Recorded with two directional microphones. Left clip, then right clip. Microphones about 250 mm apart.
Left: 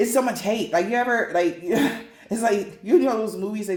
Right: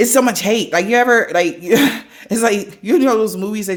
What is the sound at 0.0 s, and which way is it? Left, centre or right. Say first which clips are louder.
Speech: right 7 dB; right.